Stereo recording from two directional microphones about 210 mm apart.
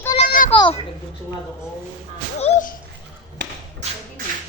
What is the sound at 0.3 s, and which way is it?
Children playing, 40° left (ahead or behind).